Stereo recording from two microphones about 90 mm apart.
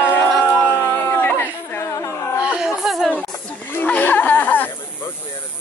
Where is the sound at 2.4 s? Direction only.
10° right (ahead or behind).